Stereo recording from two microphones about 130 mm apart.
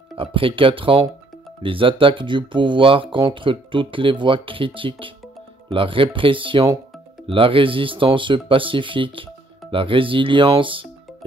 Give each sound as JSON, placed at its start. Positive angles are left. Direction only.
{"t": 0.2, "sound": "speech", "side_deg": -40}